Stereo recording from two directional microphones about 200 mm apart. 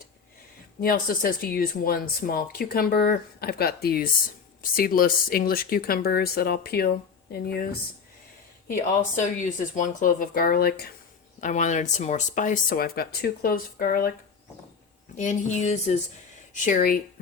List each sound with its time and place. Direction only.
0.8 s speech: 45° left (ahead or behind)
9.4 s speech: 40° left (ahead or behind)
11.3 s speech: 40° left (ahead or behind)
15.1 s speech: 40° left (ahead or behind)